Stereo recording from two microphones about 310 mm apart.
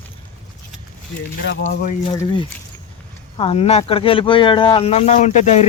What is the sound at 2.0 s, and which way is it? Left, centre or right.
Speech, centre.